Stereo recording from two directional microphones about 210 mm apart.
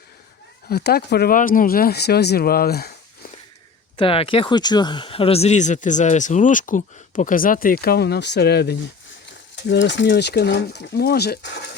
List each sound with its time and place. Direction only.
0.7 s speech: 50° left (ahead or behind)
3.9 s speech: 25° left (ahead or behind); by 11.6 s 50° left (ahead or behind)